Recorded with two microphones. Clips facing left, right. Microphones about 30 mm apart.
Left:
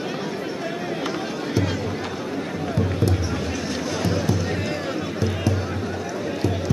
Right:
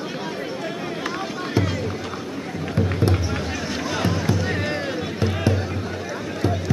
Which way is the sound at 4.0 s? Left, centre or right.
Right.